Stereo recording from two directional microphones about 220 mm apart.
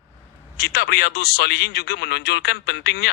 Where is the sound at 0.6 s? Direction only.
45° left (ahead or behind).